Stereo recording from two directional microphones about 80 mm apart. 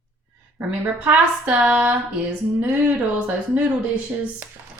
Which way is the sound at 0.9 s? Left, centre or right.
Centre.